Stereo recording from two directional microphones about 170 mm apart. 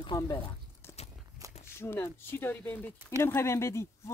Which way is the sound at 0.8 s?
15° left (ahead or behind).